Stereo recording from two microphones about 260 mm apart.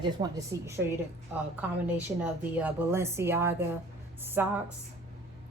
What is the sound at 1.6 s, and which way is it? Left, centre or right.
Speech, centre.